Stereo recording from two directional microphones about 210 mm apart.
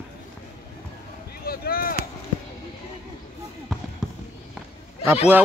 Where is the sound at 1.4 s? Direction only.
45° left (ahead or behind).